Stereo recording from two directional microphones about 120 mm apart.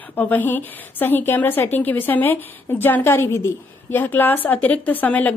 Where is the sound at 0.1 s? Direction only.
15° left (ahead or behind).